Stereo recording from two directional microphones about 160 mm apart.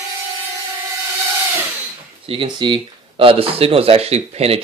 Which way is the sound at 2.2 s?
30° right (ahead or behind).